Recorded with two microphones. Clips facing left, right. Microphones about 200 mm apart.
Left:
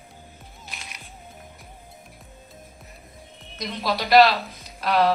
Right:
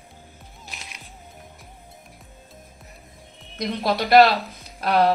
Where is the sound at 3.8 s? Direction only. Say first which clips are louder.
Right 2 dB; 50° right (ahead or behind).